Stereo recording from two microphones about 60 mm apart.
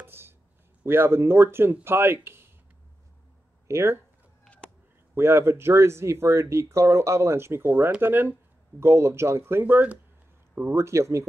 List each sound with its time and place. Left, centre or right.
0.0 s a sound: right
0.8 s speech: right
3.6 s speech: right
5.1 s speech: right
10.7 s speech: right